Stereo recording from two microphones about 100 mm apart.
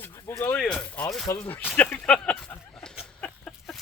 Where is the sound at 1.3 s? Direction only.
25° left (ahead or behind).